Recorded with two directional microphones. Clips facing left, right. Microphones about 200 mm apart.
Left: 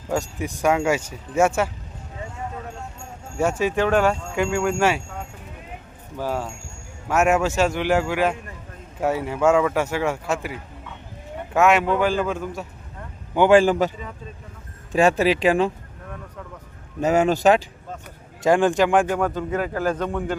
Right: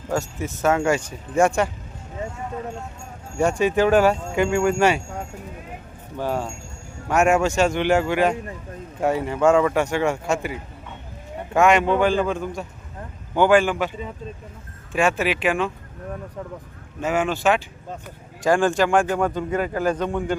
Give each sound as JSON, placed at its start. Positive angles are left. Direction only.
{"t": 0.1, "sound": "speech", "side_deg": 15}
{"t": 3.3, "sound": "a man's voice", "side_deg": 5}
{"t": 6.1, "sound": "a man's voice", "side_deg": 5}
{"t": 11.5, "sound": "a man's voice", "side_deg": 5}
{"t": 13.5, "sound": "speech", "side_deg": 35}
{"t": 14.9, "sound": "speech", "side_deg": 35}
{"t": 17.0, "sound": "speech", "side_deg": 40}
{"t": 18.4, "sound": "a man's voice", "side_deg": 20}